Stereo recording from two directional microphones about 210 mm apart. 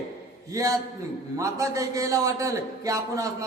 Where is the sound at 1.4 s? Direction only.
15° right (ahead or behind).